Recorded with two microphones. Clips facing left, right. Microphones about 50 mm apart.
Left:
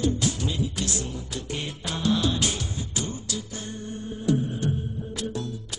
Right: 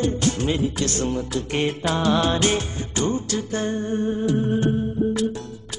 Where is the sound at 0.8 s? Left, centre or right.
Right.